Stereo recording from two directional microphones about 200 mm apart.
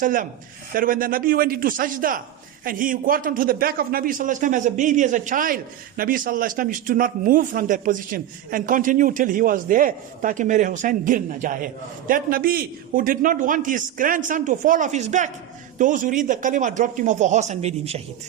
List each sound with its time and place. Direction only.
0.0 s a man's voice: 45° right (ahead or behind)